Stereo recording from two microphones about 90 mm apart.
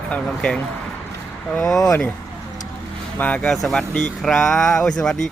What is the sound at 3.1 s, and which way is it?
Speech, 15° left (ahead or behind).